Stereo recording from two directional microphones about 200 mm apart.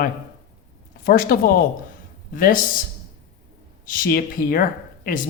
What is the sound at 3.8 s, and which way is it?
Speech, 45° left (ahead or behind).